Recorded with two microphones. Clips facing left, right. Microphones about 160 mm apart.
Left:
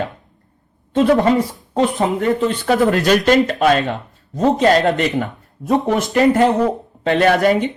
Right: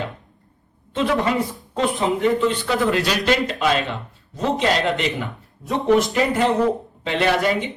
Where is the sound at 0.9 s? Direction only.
40° left (ahead or behind).